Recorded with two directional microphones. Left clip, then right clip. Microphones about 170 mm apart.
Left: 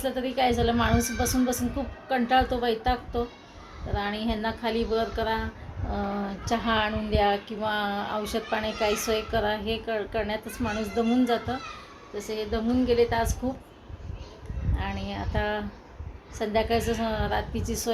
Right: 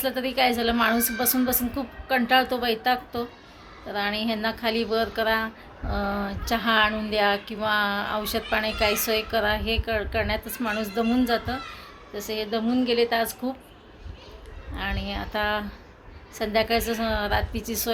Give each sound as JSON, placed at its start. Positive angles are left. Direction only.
{"t": 0.0, "sound": "a woman's voice", "side_deg": -10}
{"t": 12.1, "sound": "a woman's voice", "side_deg": -25}
{"t": 14.8, "sound": "speech", "side_deg": 0}